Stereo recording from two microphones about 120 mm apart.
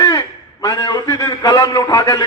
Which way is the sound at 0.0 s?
30° left (ahead or behind).